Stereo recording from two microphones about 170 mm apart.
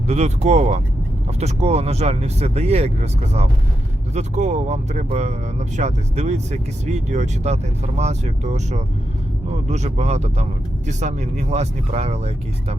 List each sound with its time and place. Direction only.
0.1 s speech: 40° right (ahead or behind)